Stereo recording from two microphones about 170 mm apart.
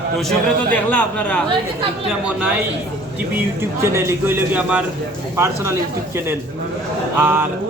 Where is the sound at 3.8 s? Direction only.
15° right (ahead or behind).